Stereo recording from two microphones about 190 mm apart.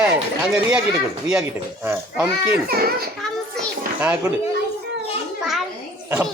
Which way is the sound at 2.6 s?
55° right (ahead or behind).